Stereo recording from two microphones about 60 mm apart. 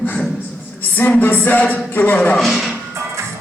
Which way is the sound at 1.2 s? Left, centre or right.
Left.